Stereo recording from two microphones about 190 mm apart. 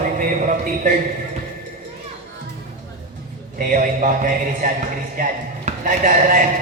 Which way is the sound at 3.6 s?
45° right (ahead or behind).